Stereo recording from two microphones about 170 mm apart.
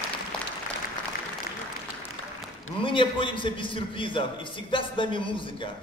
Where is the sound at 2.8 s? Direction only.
30° left (ahead or behind).